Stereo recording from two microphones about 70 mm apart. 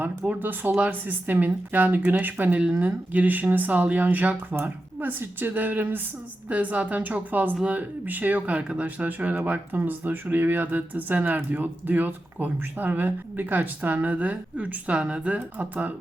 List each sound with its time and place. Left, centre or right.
0.3 s speech: right